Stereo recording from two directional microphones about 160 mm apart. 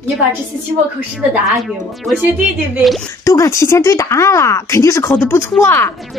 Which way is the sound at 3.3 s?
20° left (ahead or behind).